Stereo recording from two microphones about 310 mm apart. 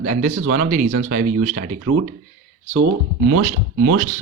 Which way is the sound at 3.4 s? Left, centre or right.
Right.